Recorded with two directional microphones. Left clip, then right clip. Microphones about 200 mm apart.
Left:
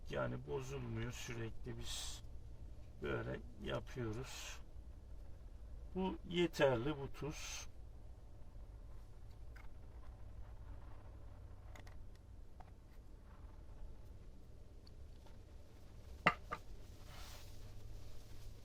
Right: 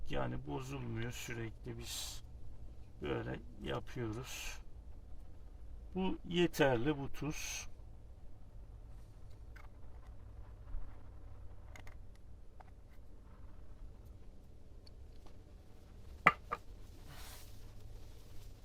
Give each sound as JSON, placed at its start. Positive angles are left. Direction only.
{"t": 0.1, "sound": "a man's voice", "side_deg": -45}
{"t": 5.9, "sound": "speech", "side_deg": -45}
{"t": 11.7, "sound": "creak", "side_deg": 5}